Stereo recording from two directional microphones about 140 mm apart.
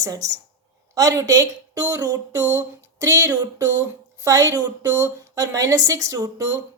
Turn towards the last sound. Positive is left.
turn(degrees=-25)  # may be behind; listen again after turning